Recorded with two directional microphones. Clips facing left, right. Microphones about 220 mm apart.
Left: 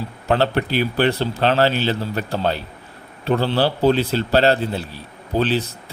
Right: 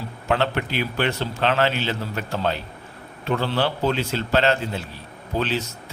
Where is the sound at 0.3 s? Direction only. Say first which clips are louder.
Left 4 dB; 35° left (ahead or behind).